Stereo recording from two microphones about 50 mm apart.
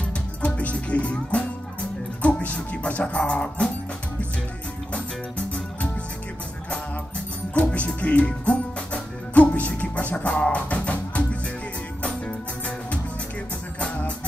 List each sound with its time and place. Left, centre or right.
0.4 s music: left
7.5 s music: left